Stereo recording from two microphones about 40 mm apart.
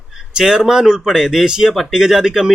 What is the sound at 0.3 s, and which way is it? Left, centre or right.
Speech, centre.